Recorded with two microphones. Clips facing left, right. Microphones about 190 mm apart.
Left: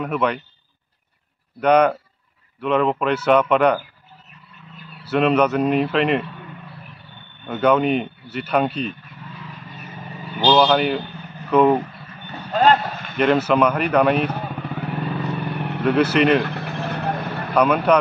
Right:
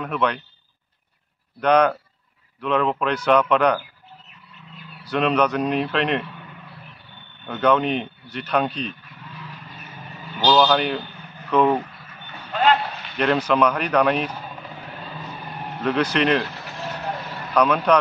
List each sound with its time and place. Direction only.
0.0 s speech: 5° left (ahead or behind)
1.6 s speech: 5° left (ahead or behind)
5.0 s speech: 5° left (ahead or behind)
7.4 s speech: 5° left (ahead or behind)
10.4 s speech: 5° left (ahead or behind)
12.3 s vehicle: 40° left (ahead or behind)
13.2 s speech: 5° left (ahead or behind)
14.2 s vehicle: 65° left (ahead or behind)
15.8 s speech: 5° left (ahead or behind)
16.4 s vehicle: 60° left (ahead or behind)
17.9 s speech: 5° left (ahead or behind)